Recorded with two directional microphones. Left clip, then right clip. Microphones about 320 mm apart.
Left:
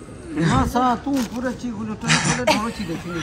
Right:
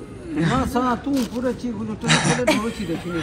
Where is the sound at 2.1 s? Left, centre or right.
Centre.